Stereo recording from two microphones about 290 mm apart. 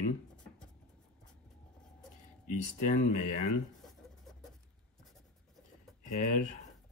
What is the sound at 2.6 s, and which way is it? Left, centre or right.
Speech, left.